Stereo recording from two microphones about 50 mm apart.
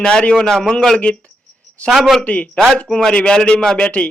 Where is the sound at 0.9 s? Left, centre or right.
Left.